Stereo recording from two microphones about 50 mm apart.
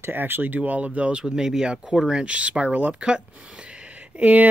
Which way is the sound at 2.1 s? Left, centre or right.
Right.